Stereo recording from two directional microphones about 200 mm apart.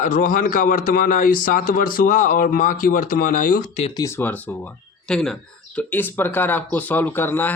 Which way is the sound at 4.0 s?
10° left (ahead or behind).